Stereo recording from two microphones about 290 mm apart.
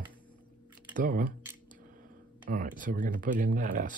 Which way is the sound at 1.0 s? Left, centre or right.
Right.